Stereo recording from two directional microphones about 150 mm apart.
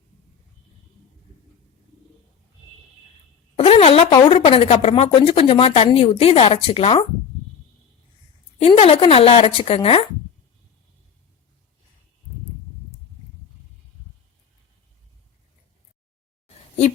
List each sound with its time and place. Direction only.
3.6 s a sound: 40° left (ahead or behind)
4.3 s a woman's voice: 40° left (ahead or behind)
8.5 s a woman's voice: 40° left (ahead or behind)